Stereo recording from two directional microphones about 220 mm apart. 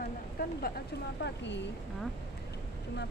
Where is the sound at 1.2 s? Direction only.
55° left (ahead or behind).